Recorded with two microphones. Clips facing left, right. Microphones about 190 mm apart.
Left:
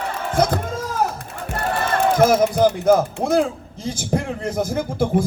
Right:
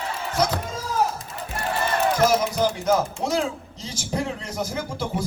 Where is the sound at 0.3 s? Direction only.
55° left (ahead or behind).